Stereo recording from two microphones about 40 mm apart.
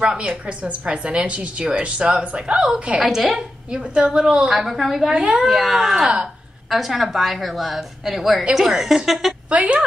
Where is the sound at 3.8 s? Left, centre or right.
Right.